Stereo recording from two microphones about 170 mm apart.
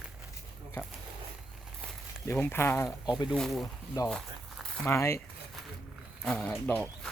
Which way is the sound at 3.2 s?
Centre (ahead or behind).